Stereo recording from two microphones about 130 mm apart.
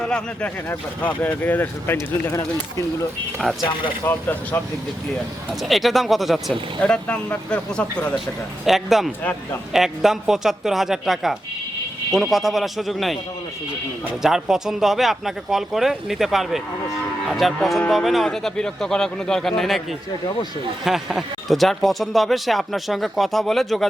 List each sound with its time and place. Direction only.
0.0 s speech: 10° left (ahead or behind)
2.3 s speech: 25° left (ahead or behind)
3.5 s speech: centre (ahead or behind)
4.0 s speech: 15° left (ahead or behind)
5.6 s speech: centre (ahead or behind)
8.6 s speech: centre (ahead or behind)
14.2 s speech: 5° right (ahead or behind)
20.8 s speech: centre (ahead or behind)